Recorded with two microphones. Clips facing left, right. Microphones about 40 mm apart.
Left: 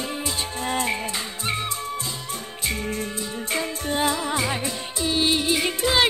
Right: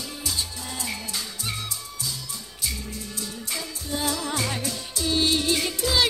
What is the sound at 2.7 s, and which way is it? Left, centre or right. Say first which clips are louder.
Music: left 8 dB; left.